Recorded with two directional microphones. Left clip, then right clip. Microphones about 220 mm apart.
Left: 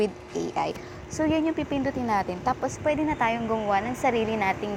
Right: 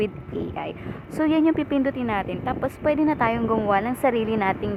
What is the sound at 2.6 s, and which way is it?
Speech, 15° right (ahead or behind).